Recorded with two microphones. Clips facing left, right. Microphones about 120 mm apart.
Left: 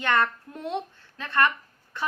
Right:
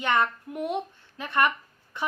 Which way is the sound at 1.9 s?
15° right (ahead or behind).